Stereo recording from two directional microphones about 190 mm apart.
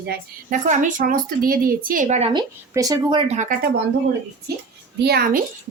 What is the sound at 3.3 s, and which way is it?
Speech, 45° right (ahead or behind).